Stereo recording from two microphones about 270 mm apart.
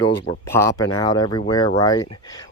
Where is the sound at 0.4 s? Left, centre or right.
Centre.